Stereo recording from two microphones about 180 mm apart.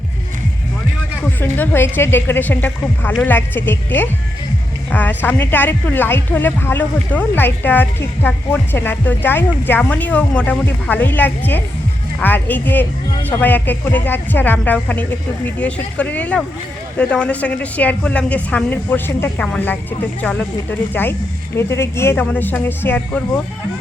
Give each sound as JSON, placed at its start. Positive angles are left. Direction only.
{"t": 1.2, "sound": "speech", "side_deg": 10}